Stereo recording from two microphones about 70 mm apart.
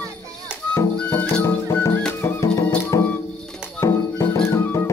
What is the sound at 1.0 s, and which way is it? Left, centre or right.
Music, left.